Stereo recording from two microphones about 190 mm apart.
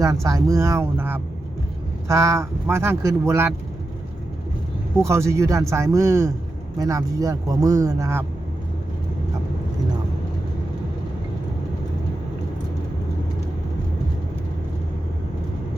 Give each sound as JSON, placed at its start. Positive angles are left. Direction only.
{"t": 0.0, "sound": "speech", "side_deg": -15}
{"t": 5.0, "sound": "speech", "side_deg": -15}